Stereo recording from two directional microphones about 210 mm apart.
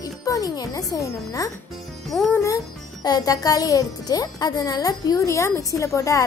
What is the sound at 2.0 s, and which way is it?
A child's voice, 5° left (ahead or behind).